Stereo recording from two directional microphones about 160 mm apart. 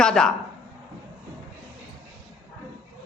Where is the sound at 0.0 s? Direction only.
5° left (ahead or behind).